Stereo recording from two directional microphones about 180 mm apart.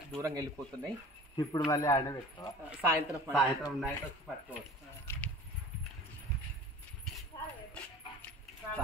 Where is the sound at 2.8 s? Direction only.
10° right (ahead or behind).